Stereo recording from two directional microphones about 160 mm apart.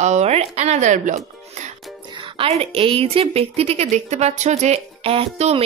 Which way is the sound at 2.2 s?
35° right (ahead or behind).